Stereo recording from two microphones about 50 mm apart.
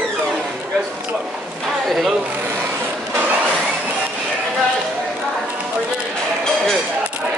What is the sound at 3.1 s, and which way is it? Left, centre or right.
Vehicle, right.